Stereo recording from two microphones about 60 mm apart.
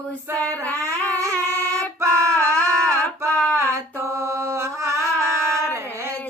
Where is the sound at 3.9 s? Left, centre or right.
Right.